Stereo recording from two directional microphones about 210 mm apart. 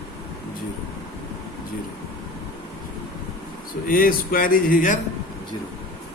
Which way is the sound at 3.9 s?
40° left (ahead or behind).